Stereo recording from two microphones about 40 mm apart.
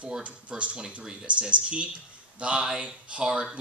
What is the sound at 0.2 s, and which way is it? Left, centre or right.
A man's voice, right.